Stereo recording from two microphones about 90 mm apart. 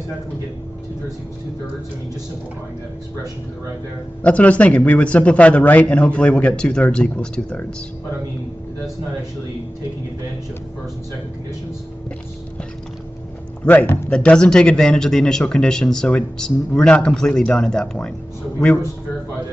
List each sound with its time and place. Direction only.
4.2 s speech: 15° left (ahead or behind)
13.7 s speech: 20° left (ahead or behind)
14.1 s speech: 10° left (ahead or behind)